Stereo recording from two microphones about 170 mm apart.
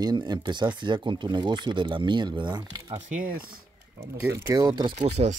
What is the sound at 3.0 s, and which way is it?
Speech, 50° right (ahead or behind).